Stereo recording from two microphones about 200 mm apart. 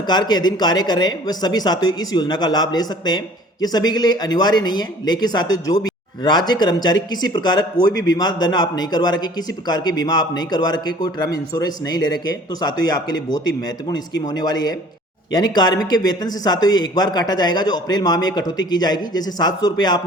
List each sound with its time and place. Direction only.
0.1 s speech: 20° left (ahead or behind)